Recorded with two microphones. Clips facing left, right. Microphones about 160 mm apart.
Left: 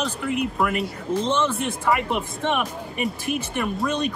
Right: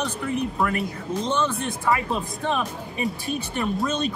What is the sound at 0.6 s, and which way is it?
Speech, centre (ahead or behind).